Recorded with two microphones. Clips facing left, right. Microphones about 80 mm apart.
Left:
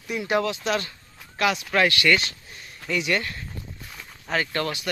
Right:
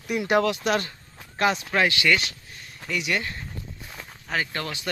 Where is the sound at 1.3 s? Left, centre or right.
Right.